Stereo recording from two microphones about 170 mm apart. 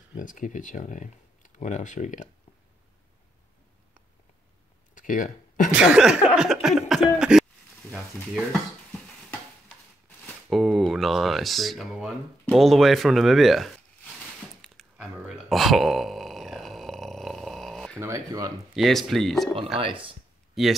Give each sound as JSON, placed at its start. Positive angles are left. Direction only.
{"t": 0.2, "sound": "speech", "side_deg": 50}
{"t": 4.9, "sound": "a sound", "side_deg": 50}
{"t": 5.7, "sound": "cough", "side_deg": -5}
{"t": 7.9, "sound": "stir", "side_deg": 0}
{"t": 10.0, "sound": "speech", "side_deg": 5}
{"t": 14.6, "sound": "a sound", "side_deg": 0}
{"t": 17.9, "sound": "speech", "side_deg": -20}
{"t": 18.8, "sound": "cough", "side_deg": 0}
{"t": 19.8, "sound": "speech", "side_deg": -30}
{"t": 20.6, "sound": "cough", "side_deg": 0}